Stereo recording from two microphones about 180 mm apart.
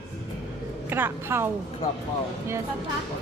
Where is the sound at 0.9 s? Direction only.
15° right (ahead or behind).